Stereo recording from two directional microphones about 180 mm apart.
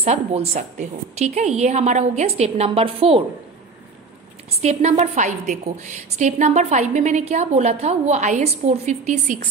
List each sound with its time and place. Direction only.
0.0 s a woman's voice: 35° right (ahead or behind)
4.5 s a woman's voice: 35° right (ahead or behind)